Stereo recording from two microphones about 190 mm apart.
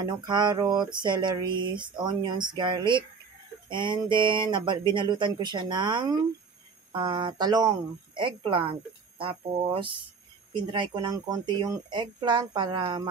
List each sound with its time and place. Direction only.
0.0 s speech: 20° right (ahead or behind)